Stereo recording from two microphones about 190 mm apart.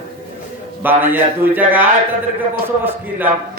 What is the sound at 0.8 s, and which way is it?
Speech, 10° right (ahead or behind).